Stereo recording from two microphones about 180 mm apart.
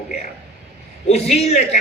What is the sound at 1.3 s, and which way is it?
Speech, 35° left (ahead or behind).